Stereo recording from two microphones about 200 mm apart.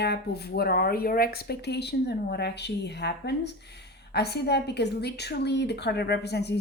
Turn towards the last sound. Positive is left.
turn(degrees=55)  # may be behind; listen again after turning